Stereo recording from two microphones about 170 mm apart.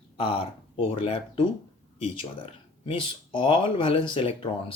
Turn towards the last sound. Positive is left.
turn(degrees=30)  # may be behind; listen again after turning